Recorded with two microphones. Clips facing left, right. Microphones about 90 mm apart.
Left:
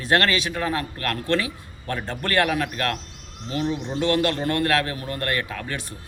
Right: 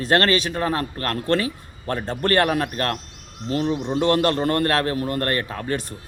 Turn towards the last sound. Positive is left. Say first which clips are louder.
# right 3 dB
turn(degrees=-35)  # may be behind; listen again after turning